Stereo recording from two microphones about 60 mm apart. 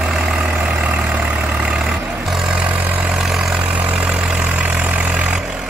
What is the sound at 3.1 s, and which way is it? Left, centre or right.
Vehicle, centre.